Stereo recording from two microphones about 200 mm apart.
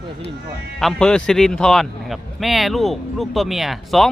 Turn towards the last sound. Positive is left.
turn(degrees=0)  # may be behind; listen again after turning